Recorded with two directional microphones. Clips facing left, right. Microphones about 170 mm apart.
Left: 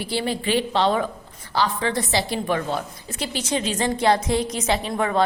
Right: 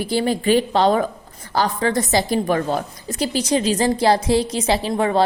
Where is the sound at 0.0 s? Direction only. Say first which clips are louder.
Right 5 dB; 45° right (ahead or behind).